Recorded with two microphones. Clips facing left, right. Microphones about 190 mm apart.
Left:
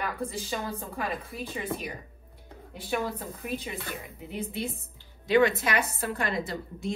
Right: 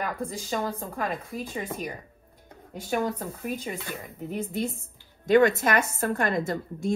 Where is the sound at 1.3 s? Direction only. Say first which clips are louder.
Right 3 dB; 45° right (ahead or behind).